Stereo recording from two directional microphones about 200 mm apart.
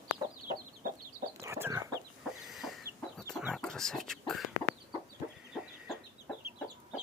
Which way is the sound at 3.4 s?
Centre (ahead or behind).